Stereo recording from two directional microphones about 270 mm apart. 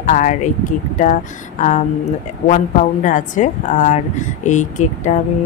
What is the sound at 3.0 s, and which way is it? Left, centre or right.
Speech, left.